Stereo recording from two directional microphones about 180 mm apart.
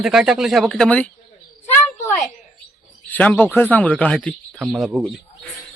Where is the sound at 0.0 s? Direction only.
5° right (ahead or behind).